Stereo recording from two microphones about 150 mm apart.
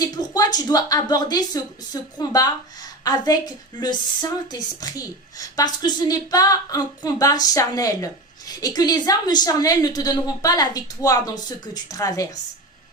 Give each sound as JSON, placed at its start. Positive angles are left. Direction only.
{"t": 0.0, "sound": "speech", "side_deg": 25}